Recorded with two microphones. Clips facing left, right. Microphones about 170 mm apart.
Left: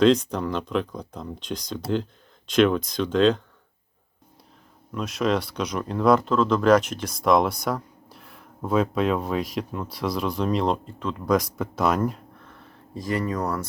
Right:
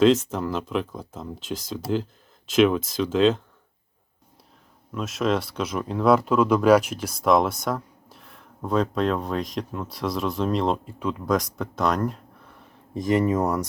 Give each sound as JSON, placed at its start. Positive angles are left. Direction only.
{"t": 0.0, "sound": "speech", "side_deg": -5}
{"t": 4.9, "sound": "speech", "side_deg": 0}
{"t": 12.5, "sound": "a sound", "side_deg": -15}